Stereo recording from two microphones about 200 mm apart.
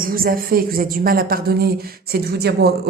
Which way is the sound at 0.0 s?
45° right (ahead or behind).